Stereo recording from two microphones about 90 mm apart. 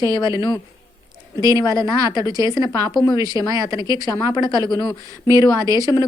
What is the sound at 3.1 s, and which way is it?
Speech, 45° right (ahead or behind).